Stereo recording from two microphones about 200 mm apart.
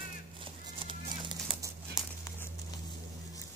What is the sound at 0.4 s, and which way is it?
Horse, 25° right (ahead or behind).